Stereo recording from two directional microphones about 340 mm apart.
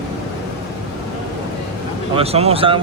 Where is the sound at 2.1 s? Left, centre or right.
Centre.